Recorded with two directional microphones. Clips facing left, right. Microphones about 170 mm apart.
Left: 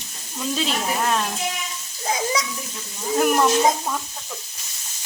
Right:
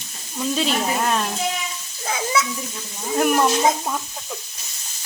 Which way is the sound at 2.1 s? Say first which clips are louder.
Right 1 dB; 35° left (ahead or behind).